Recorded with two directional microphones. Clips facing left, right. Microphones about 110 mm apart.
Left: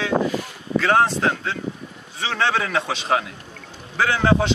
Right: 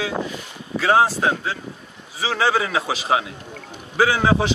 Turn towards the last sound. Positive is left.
turn(degrees=-5)  # may be behind; listen again after turning